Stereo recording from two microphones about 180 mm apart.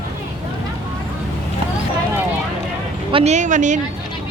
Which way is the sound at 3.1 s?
35° right (ahead or behind).